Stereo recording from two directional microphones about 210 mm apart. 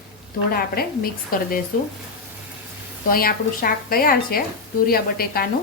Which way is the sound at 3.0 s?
45° left (ahead or behind).